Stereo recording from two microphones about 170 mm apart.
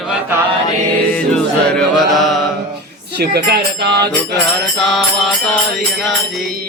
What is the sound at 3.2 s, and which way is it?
Speech, 65° right (ahead or behind).